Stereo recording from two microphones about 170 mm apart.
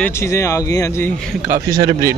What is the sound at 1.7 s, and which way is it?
Speech, 20° right (ahead or behind).